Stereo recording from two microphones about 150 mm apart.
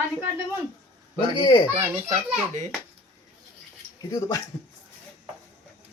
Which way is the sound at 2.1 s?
50° right (ahead or behind).